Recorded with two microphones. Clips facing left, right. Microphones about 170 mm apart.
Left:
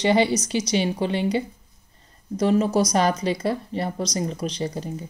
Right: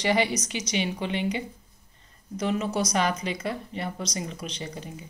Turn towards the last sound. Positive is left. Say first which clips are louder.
# left 8 dB
turn(degrees=40)  # may be behind; listen again after turning